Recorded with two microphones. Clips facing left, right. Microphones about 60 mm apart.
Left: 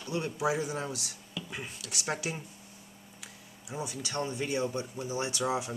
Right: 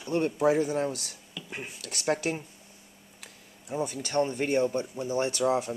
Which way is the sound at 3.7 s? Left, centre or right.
Right.